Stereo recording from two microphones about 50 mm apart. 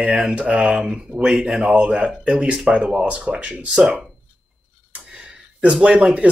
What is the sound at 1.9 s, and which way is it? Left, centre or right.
Speech, centre.